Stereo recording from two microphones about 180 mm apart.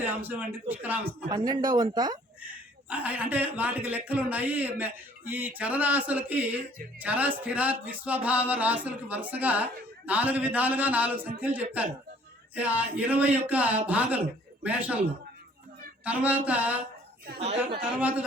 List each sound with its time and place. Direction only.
0.0 s a man's voice: 10° right (ahead or behind)
1.3 s speech: 25° right (ahead or behind)
2.9 s a man's voice: 10° right (ahead or behind)
16.0 s a man's voice: 10° right (ahead or behind)